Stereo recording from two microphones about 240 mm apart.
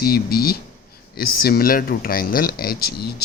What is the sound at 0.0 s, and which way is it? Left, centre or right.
A man's voice, left.